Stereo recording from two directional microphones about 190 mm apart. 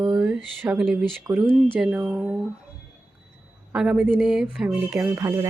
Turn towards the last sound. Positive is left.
turn(degrees=-15)  # may be behind; listen again after turning